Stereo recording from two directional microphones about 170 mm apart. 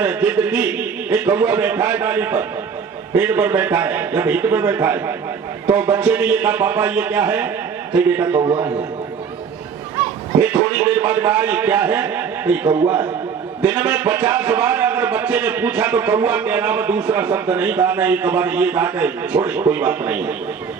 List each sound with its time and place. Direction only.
0.0 s speech: 5° right (ahead or behind)
8.4 s a man's voice: 30° right (ahead or behind)
10.4 s speech: 10° right (ahead or behind)